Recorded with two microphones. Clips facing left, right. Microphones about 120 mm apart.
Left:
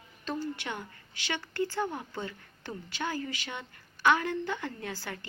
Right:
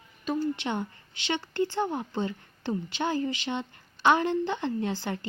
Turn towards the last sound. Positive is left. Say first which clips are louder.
# right 9 dB
turn(degrees=-25)  # may be behind; listen again after turning